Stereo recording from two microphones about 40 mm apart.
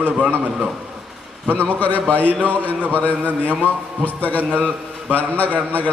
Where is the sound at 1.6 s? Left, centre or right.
Left.